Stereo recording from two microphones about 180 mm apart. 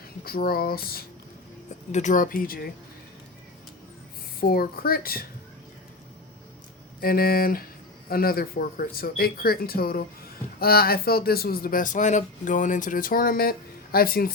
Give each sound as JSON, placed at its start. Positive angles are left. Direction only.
{"t": 0.3, "sound": "speech", "side_deg": 55}
{"t": 1.9, "sound": "speech", "side_deg": 40}
{"t": 4.4, "sound": "speech", "side_deg": 55}
{"t": 7.0, "sound": "speech", "side_deg": 55}